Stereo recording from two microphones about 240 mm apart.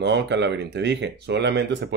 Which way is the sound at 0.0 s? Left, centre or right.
Right.